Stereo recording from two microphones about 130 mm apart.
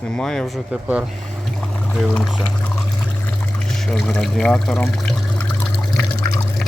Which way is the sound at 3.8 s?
5° left (ahead or behind).